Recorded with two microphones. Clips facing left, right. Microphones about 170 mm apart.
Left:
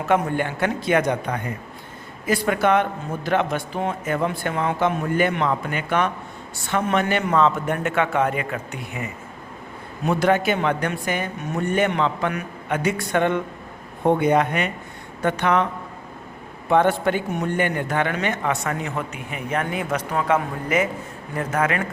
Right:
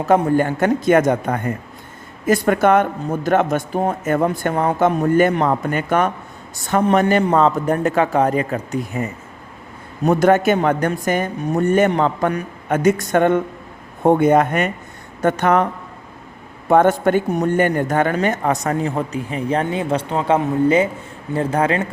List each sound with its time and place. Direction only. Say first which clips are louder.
0.0 s a man's voice: right 6 dB; 35° right (ahead or behind)
10.1 s a man's voice: right 5 dB; 45° right (ahead or behind)
16.6 s a man's voice: right 4 dB; 45° right (ahead or behind); by 21.8 s 30° right (ahead or behind)